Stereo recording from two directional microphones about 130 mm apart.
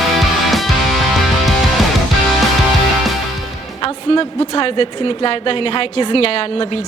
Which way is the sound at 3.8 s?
40° left (ahead or behind).